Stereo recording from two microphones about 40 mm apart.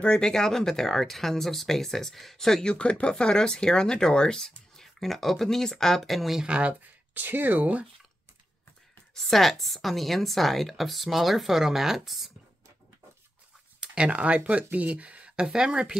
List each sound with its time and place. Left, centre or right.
0.2 s speech: centre
2.6 s speech: left
4.7 s speech: centre
6.4 s speech: right
7.2 s speech: right
9.1 s speech: centre
13.7 s speech: right
15.4 s speech: centre